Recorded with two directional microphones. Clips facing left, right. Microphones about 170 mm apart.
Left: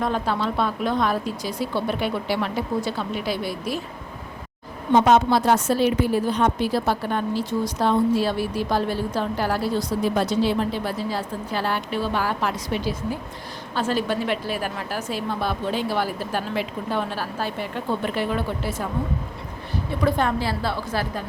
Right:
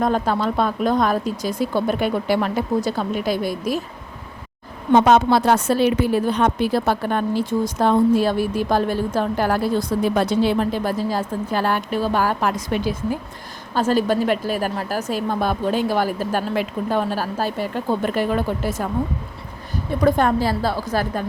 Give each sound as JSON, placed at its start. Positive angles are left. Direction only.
{"t": 0.0, "sound": "a woman's voice", "side_deg": -45}
{"t": 4.9, "sound": "a woman's voice", "side_deg": -70}
{"t": 20.0, "sound": "a woman's voice", "side_deg": -45}